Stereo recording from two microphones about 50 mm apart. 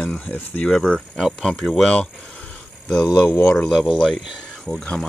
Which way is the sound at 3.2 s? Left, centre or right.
Left.